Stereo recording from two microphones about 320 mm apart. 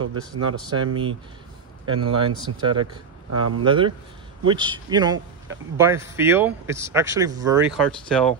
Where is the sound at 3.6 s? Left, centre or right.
Centre.